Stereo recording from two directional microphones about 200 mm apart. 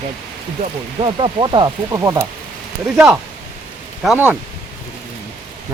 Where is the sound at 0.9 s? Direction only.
25° right (ahead or behind).